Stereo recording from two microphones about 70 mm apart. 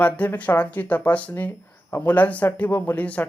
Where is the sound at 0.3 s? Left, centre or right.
Left.